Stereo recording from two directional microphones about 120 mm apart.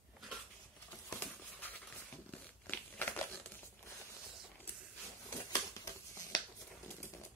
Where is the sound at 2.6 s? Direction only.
15° left (ahead or behind).